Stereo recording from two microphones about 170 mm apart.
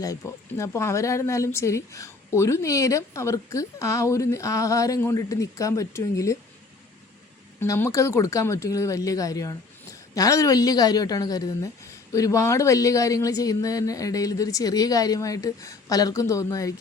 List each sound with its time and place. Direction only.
0.0 s speech: 20° left (ahead or behind)
7.6 s speech: 15° left (ahead or behind)